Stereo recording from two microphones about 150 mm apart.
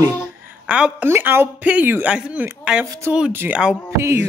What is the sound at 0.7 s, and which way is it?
Speech, 10° right (ahead or behind).